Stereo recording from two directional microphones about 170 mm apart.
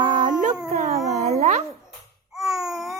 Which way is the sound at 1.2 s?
40° right (ahead or behind).